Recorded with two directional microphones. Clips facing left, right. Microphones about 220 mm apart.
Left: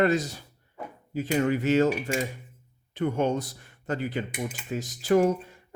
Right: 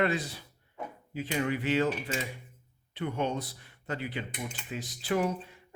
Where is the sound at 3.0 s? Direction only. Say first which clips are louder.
Left 6 dB; 45° left (ahead or behind).